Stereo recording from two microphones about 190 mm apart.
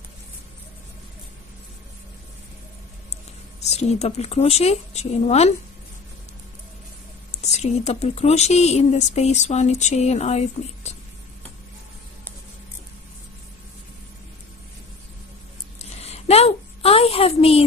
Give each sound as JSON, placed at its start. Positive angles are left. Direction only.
{"t": 3.6, "sound": "speech", "side_deg": 35}
{"t": 7.2, "sound": "speech", "side_deg": 35}
{"t": 15.8, "sound": "a sound", "side_deg": 35}